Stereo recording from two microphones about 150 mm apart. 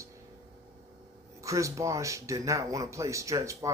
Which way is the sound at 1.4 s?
20° right (ahead or behind).